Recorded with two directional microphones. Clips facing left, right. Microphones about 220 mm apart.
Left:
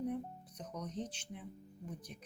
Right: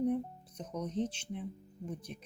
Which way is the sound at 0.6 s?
25° right (ahead or behind).